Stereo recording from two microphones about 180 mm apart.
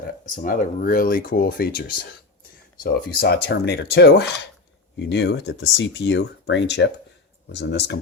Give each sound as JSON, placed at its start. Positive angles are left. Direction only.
{"t": 0.3, "sound": "speech", "side_deg": 50}